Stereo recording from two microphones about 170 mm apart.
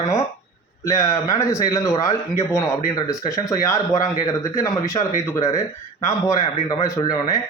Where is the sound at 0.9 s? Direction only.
15° left (ahead or behind).